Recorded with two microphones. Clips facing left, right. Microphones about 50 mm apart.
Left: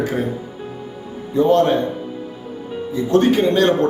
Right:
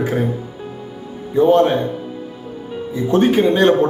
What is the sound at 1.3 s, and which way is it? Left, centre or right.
Speech, centre.